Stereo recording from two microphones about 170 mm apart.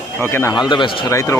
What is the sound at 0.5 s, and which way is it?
Speech, 25° left (ahead or behind).